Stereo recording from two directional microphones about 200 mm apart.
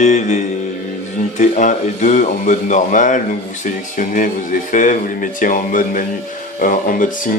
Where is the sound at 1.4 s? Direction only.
40° left (ahead or behind).